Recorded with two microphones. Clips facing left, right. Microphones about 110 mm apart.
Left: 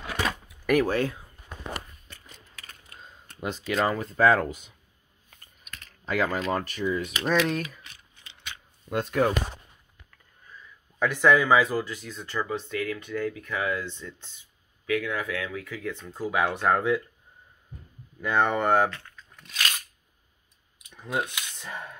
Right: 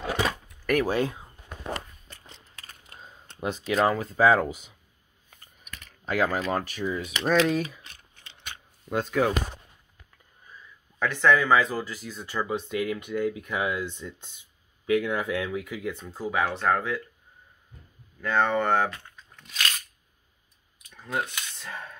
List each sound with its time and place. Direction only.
0.5 s door: centre (ahead or behind)
0.8 s speech: 20° right (ahead or behind)
2.2 s a sound: 25° right (ahead or behind)
3.3 s speech: 5° right (ahead or behind)
6.0 s speech: 5° right (ahead or behind)
7.8 s typing: 45° right (ahead or behind)
8.8 s speech: centre (ahead or behind)
11.0 s speech: 10° left (ahead or behind); by 12.4 s 5° right (ahead or behind)
12.4 s speech: 15° right (ahead or behind); by 17.0 s 15° left (ahead or behind)
18.2 s speech: 15° left (ahead or behind)
18.9 s speech: 20° right (ahead or behind)
19.5 s a sound: 5° left (ahead or behind)
20.8 s speech: 15° left (ahead or behind)